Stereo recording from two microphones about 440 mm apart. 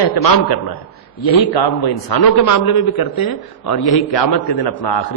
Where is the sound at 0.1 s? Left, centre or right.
Left.